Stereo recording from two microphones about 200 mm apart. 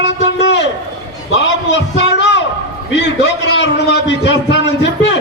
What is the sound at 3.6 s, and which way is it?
A man's voice, 60° left (ahead or behind).